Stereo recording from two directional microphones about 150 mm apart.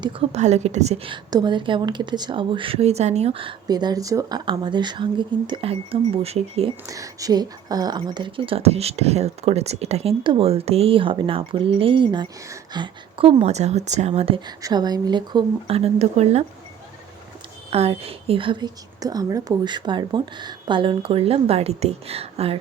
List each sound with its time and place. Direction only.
0.0 s a woman's voice: 45° right (ahead or behind)
6.8 s a woman's voice: 20° right (ahead or behind); by 14.1 s 50° right (ahead or behind)
14.2 s a woman's voice: 35° right (ahead or behind)
17.7 s a woman's voice: 40° right (ahead or behind)